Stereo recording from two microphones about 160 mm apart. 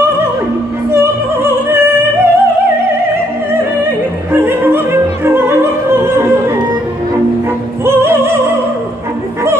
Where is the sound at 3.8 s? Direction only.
15° right (ahead or behind).